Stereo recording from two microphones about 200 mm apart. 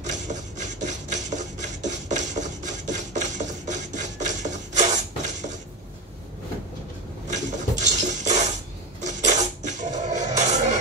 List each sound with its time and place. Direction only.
0.1 s filing: 35° right (ahead or behind)
7.2 s dishes: 35° right (ahead or behind)
9.0 s a sound: 35° right (ahead or behind)